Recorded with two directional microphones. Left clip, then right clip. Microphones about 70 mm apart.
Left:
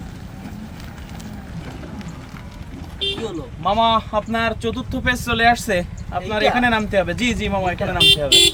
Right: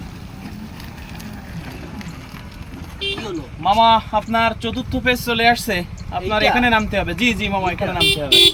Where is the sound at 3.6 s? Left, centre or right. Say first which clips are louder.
Right 3 dB; left.